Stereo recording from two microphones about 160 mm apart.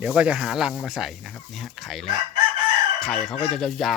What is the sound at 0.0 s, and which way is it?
Speech, 5° right (ahead or behind).